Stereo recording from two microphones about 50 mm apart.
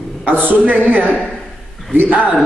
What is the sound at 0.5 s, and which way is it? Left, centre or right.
Speech, right.